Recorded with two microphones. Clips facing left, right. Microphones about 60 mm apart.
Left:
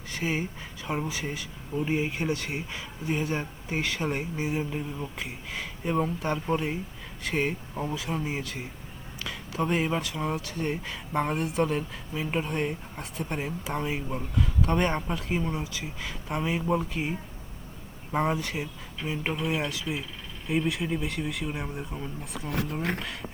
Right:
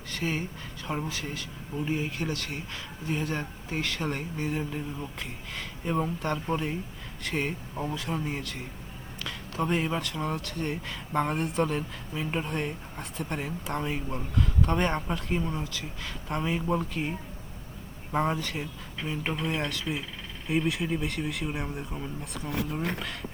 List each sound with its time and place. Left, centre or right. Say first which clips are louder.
0.1 s speech: left 2 dB; centre
1.7 s speech: left 3 dB; left
2.0 s speech: left 3 dB; centre